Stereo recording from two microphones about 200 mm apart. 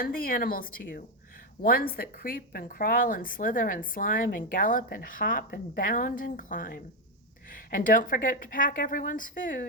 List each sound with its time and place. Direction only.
0.0 s a woman's voice: 45° left (ahead or behind)